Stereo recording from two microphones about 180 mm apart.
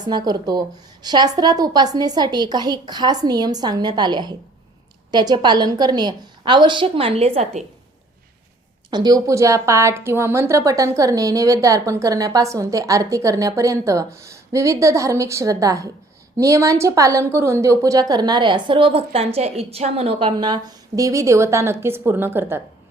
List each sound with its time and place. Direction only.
0.1 s a woman's voice: 20° right (ahead or behind)
8.9 s a woman's voice: 20° right (ahead or behind)